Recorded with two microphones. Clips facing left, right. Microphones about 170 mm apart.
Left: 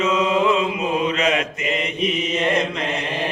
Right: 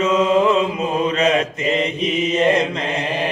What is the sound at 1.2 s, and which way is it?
Mantra, 35° right (ahead or behind).